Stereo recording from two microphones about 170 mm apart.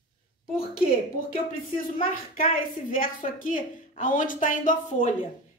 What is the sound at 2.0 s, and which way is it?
A woman's voice, 55° left (ahead or behind).